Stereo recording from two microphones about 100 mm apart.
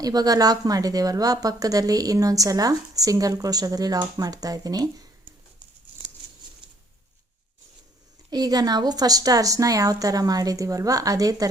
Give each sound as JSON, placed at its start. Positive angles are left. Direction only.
{"t": 0.0, "sound": "a woman's voice", "side_deg": -40}
{"t": 8.3, "sound": "a woman's voice", "side_deg": -40}